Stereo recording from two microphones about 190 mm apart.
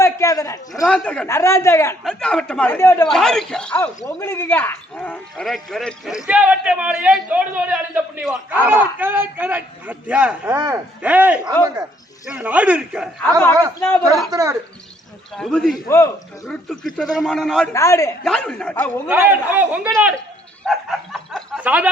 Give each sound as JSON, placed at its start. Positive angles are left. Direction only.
{"t": 0.0, "sound": "a sound", "side_deg": 15}
{"t": 0.9, "sound": "a man's voice", "side_deg": 5}
{"t": 2.0, "sound": "a man's voice", "side_deg": 5}
{"t": 3.1, "sound": "a man's voice", "side_deg": 0}
{"t": 13.7, "sound": "a man's voice", "side_deg": 10}
{"t": 14.3, "sound": "speech", "side_deg": -15}
{"t": 15.4, "sound": "a man's voice", "side_deg": 0}
{"t": 15.9, "sound": "a man's voice", "side_deg": 15}
{"t": 16.5, "sound": "a man's voice", "side_deg": 0}
{"t": 17.7, "sound": "a man's voice", "side_deg": 15}
{"t": 18.2, "sound": "a man's voice", "side_deg": 5}
{"t": 19.0, "sound": "a man's voice", "side_deg": -10}